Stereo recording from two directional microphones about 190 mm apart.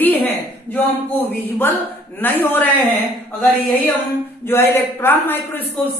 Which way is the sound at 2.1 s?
10° left (ahead or behind).